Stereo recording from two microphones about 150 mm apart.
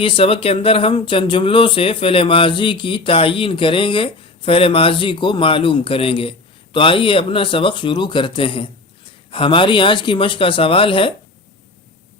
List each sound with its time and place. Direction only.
0.0 s speech: 35° left (ahead or behind)